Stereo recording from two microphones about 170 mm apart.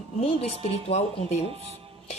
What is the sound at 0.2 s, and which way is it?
Speech, 35° left (ahead or behind).